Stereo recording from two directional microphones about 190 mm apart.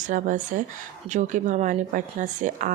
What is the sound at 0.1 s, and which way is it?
Speech, 45° right (ahead or behind).